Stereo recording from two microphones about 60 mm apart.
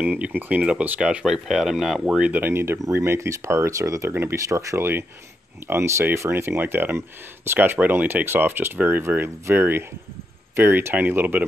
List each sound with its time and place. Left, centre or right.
0.0 s speech: right
1.2 s speech: centre
2.5 s speech: right
2.8 s speech: right
4.1 s speech: right
4.5 s speech: right